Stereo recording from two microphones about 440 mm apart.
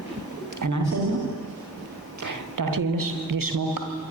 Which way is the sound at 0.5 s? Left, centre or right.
Right.